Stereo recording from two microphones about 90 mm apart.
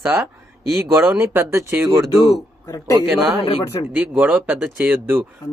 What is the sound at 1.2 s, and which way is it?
Speech, 30° right (ahead or behind).